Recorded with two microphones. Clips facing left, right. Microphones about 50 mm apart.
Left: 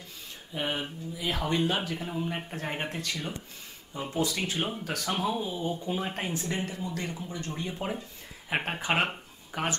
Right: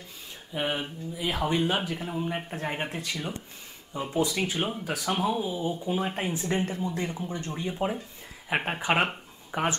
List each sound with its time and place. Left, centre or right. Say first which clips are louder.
0.6 s speech: right 2 dB; centre
4.1 s speech: right 3 dB; right
4.4 s speech: right 2 dB; centre
6.3 s speech: right 4 dB; centre
6.6 s speech: right 4 dB; right
7.5 s speech: right 4 dB; centre
9.5 s speech: right 4 dB; right